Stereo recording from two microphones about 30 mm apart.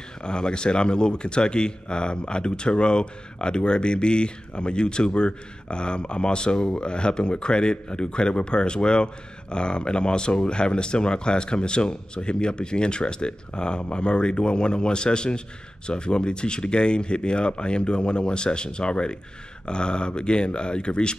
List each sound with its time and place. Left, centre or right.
0.2 s a man's voice: left